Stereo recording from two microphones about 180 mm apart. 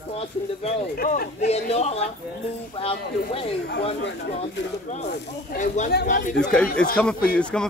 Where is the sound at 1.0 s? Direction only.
55° left (ahead or behind).